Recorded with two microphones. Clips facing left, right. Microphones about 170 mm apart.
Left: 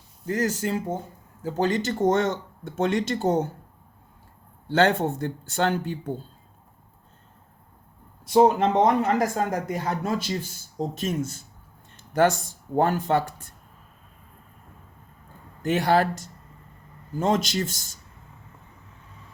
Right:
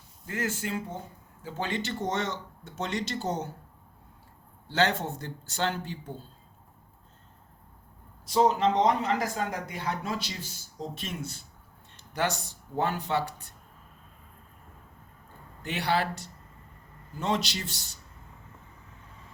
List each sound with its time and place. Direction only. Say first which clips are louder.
0.3 s speech: left 7 dB; 40° left (ahead or behind)
4.7 s speech: left 6 dB; 50° left (ahead or behind)
8.3 s speech: left 5 dB; 55° left (ahead or behind)
15.6 s speech: left 7 dB; 45° left (ahead or behind)